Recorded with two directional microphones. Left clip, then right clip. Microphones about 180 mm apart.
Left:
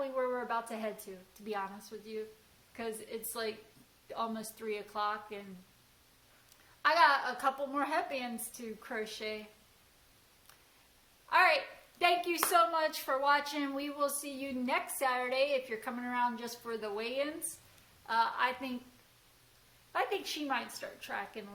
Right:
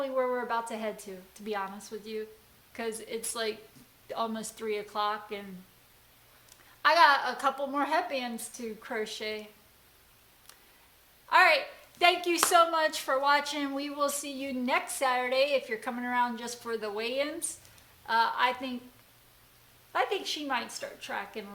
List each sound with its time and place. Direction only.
0.0 s a sound: 25° right (ahead or behind)
1.5 s a woman's voice: 30° right (ahead or behind)
6.8 s a woman's voice: 30° right (ahead or behind)
11.3 s a woman's voice: 30° right (ahead or behind)
19.9 s a woman's voice: 25° right (ahead or behind)